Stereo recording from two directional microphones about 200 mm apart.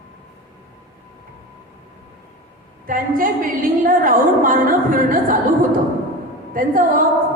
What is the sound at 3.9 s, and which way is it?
A woman's voice, 45° right (ahead or behind).